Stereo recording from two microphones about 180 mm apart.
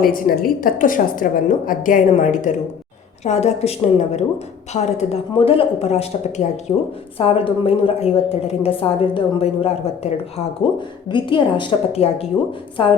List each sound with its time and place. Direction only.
0.0 s a woman's voice: 55° left (ahead or behind); by 12.9 s 30° left (ahead or behind)